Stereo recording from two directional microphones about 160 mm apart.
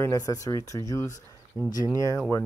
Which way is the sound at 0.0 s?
20° left (ahead or behind).